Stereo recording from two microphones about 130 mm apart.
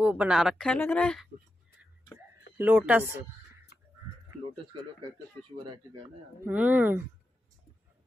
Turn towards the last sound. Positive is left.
turn(degrees=-15)  # may be behind; listen again after turning